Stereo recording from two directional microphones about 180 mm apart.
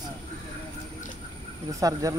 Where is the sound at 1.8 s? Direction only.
20° right (ahead or behind).